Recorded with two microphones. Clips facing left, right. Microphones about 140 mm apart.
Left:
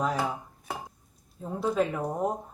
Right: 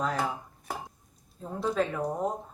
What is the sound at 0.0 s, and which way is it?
Dishes, 10° left (ahead or behind).